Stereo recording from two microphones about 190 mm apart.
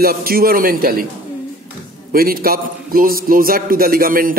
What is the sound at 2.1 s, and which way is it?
A man's voice, 50° right (ahead or behind).